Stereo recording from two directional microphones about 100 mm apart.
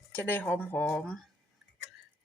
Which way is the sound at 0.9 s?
5° left (ahead or behind).